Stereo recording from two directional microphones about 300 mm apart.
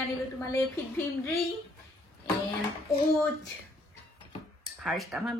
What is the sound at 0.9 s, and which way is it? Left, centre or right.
Speech, centre.